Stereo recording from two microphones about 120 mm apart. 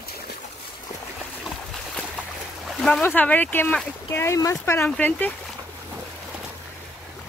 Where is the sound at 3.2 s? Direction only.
15° left (ahead or behind).